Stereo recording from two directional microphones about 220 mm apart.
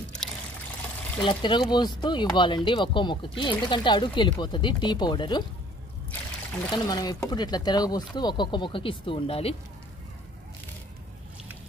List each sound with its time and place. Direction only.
1.2 s speech: 20° left (ahead or behind)
6.7 s speech: 20° left (ahead or behind)